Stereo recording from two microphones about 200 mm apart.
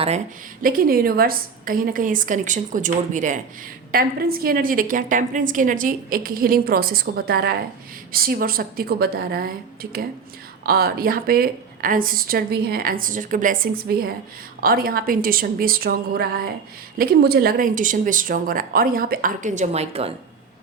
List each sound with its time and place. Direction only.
0.6 s a woman's voice: 45° right (ahead or behind)
10.7 s a woman's voice: 50° right (ahead or behind); by 20.1 s 30° right (ahead or behind)